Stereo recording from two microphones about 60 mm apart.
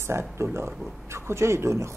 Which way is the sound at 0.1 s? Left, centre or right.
Right.